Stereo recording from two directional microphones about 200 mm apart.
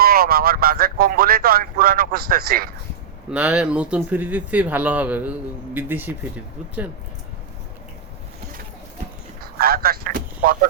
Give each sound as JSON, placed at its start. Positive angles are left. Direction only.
{"t": 0.0, "sound": "speech", "side_deg": -50}
{"t": 3.2, "sound": "speech", "side_deg": -5}
{"t": 9.4, "sound": "speech", "side_deg": -50}